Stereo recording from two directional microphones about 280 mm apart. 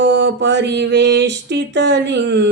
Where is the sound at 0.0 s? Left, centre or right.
Right.